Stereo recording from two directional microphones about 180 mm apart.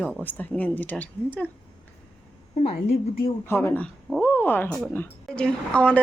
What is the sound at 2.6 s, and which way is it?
Speech, 30° left (ahead or behind).